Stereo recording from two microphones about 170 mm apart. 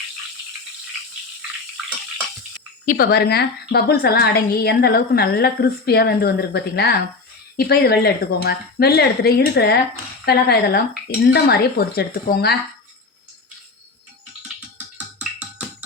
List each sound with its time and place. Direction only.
2.8 s a woman's voice: 55° left (ahead or behind)
14.9 s music: 10° right (ahead or behind)